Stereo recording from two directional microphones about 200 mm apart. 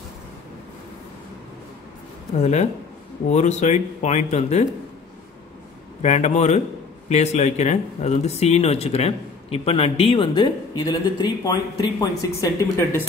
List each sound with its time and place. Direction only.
2.4 s speech: 35° left (ahead or behind)
6.0 s speech: 35° left (ahead or behind); by 13.0 s 15° left (ahead or behind)